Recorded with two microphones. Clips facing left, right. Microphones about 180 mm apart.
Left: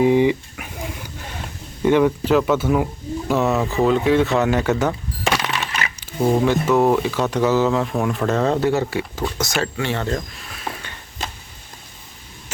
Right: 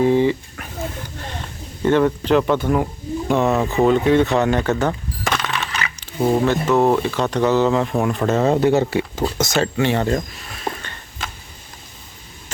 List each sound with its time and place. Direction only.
0.0 s a sound: 15° left (ahead or behind)
1.8 s speech: 10° left (ahead or behind)
3.6 s speech: 20° right (ahead or behind)
3.8 s speech: centre (ahead or behind)
5.2 s coin: 10° left (ahead or behind)
6.1 s speech: 10° right (ahead or behind)
6.4 s speech: 10° left (ahead or behind); by 8.5 s 10° right (ahead or behind)
8.6 s speech: 20° right (ahead or behind)